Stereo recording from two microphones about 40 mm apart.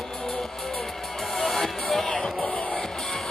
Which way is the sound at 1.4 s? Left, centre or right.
Centre.